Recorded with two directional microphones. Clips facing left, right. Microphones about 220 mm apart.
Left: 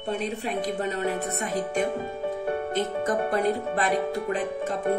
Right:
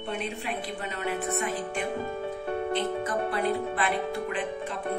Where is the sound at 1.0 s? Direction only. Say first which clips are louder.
Left 1 dB; 40° left (ahead or behind).